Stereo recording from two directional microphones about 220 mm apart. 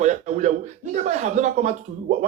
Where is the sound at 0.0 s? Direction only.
35° right (ahead or behind).